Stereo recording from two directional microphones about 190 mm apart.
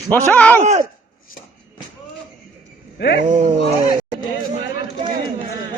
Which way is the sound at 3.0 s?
60° left (ahead or behind).